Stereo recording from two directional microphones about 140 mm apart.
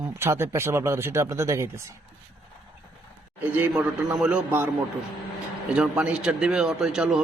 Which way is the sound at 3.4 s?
15° right (ahead or behind).